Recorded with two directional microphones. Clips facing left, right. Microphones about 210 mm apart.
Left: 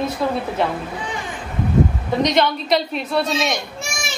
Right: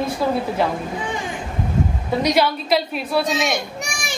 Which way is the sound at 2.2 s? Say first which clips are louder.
Left 1 dB; 5° right (ahead or behind).